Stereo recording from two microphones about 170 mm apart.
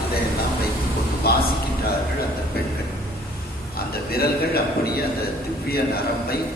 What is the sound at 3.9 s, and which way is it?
A man's voice, 65° left (ahead or behind).